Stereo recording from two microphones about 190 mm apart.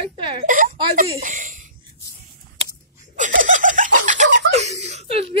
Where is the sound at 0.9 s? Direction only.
45° right (ahead or behind).